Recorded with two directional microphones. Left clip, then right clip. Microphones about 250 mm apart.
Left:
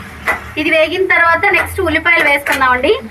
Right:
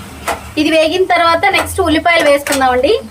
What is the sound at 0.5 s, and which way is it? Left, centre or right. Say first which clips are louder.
A woman's voice: right 2 dB; right.